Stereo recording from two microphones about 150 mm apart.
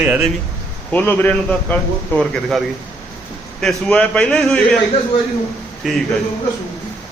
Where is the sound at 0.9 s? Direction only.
10° left (ahead or behind).